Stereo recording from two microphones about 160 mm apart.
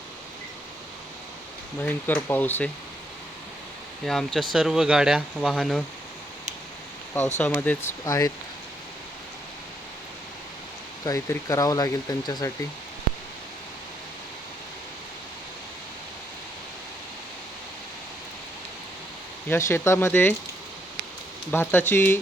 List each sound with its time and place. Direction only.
1.8 s speech: 10° left (ahead or behind)
4.0 s speech: 5° left (ahead or behind)
7.3 s speech: 10° left (ahead or behind)
11.0 s speech: 20° left (ahead or behind)
19.5 s speech: 15° left (ahead or behind)
21.5 s speech: 15° left (ahead or behind)